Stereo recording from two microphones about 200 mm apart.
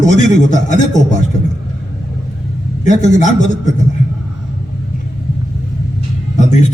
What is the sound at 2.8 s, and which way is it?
Speech, 35° left (ahead or behind).